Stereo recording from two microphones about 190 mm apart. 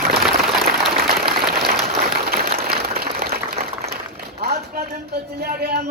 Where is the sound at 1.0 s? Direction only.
55° right (ahead or behind).